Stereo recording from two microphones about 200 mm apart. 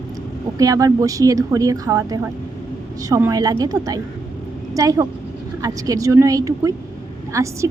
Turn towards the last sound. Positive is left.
turn(degrees=-15)  # may be behind; listen again after turning